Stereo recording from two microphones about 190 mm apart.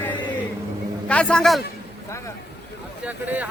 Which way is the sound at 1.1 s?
5° left (ahead or behind).